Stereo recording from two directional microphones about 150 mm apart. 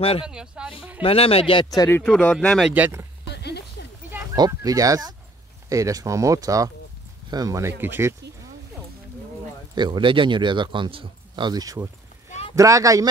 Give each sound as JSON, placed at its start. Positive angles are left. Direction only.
{"t": 0.0, "sound": "speech", "side_deg": 40}
{"t": 0.3, "sound": "speech", "side_deg": -5}
{"t": 1.0, "sound": "speech", "side_deg": 40}
{"t": 1.8, "sound": "speech", "side_deg": 15}
{"t": 2.0, "sound": "speech", "side_deg": 5}
{"t": 2.7, "sound": "speech", "side_deg": -15}
{"t": 3.3, "sound": "a sound", "side_deg": 90}
{"t": 4.5, "sound": "speech", "side_deg": -25}
{"t": 9.8, "sound": "speech", "side_deg": -30}